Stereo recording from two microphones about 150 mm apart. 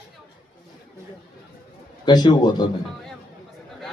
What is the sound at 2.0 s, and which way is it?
Speech, 30° left (ahead or behind).